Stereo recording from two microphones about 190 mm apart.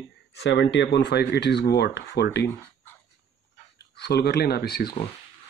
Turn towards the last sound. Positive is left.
turn(degrees=55)  # may be behind; listen again after turning